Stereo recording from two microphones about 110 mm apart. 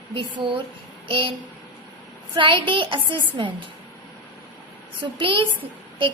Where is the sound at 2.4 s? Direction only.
50° right (ahead or behind).